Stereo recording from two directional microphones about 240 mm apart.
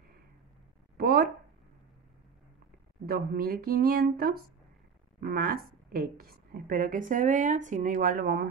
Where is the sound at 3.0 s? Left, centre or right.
Right.